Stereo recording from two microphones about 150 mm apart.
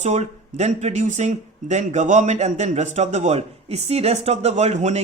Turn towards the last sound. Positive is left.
turn(degrees=-50)  # may be behind; listen again after turning